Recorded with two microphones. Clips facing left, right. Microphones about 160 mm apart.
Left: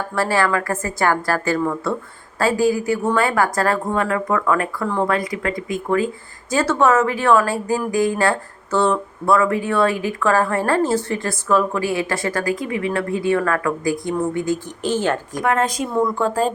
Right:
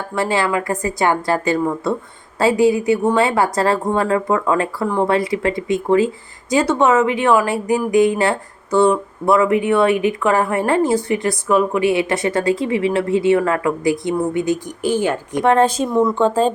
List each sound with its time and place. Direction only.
0.2 s a woman's voice: 20° right (ahead or behind)
15.3 s speech: 25° right (ahead or behind)